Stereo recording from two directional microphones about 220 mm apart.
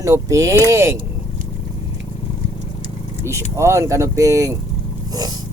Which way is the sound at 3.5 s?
15° right (ahead or behind).